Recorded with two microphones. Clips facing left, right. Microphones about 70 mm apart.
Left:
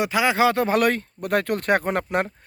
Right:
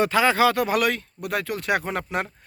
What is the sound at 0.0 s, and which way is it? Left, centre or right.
Speech, centre.